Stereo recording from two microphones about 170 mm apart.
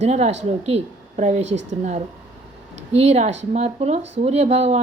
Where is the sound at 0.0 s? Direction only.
40° right (ahead or behind).